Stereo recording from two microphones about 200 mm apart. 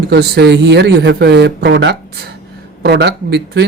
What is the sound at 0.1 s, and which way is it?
Speech, 55° right (ahead or behind).